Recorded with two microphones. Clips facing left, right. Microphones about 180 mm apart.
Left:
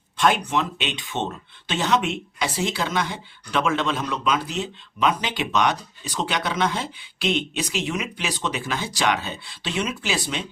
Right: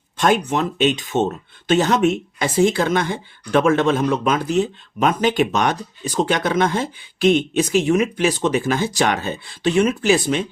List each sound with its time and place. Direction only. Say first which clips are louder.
0.2 s speech: right 3 dB; 45° right (ahead or behind)